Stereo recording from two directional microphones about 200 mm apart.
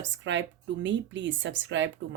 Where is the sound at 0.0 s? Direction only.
65° right (ahead or behind).